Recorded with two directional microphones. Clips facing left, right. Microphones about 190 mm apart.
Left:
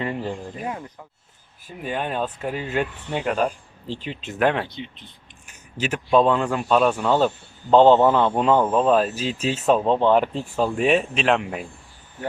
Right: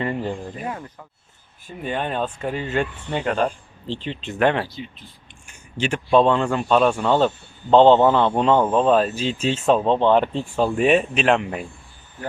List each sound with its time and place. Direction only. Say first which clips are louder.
0.0 s speech: right 2 dB; centre (ahead or behind)
0.7 s speech: even; 15° left (ahead or behind)
1.6 s speech: right 1 dB; 5° left (ahead or behind)
4.7 s speech: even; 20° left (ahead or behind)
5.8 s speech: right 1 dB; 5° left (ahead or behind)